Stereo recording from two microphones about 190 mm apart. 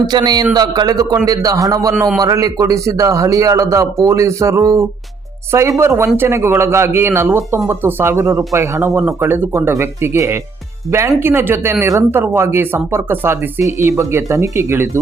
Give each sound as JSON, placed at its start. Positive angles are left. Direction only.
{"t": 0.0, "sound": "a man's voice", "side_deg": -20}